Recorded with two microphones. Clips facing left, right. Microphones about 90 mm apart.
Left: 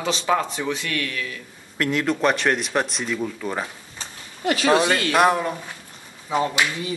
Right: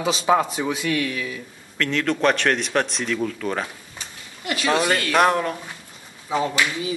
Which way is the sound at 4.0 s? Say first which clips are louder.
Left 8 dB; 30° left (ahead or behind).